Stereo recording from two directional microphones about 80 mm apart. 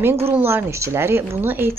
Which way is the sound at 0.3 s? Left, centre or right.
Right.